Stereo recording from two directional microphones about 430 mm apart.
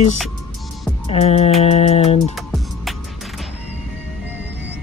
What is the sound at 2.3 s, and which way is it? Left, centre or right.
Music, centre.